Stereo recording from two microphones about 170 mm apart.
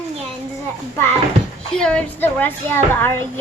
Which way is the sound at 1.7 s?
5° left (ahead or behind).